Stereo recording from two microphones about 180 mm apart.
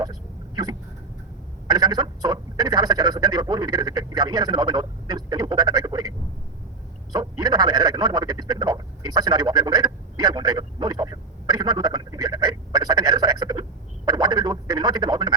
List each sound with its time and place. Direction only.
0.0 s vehicle: 20° right (ahead or behind)
1.6 s speech: 20° right (ahead or behind)
7.1 s a sound: 20° right (ahead or behind)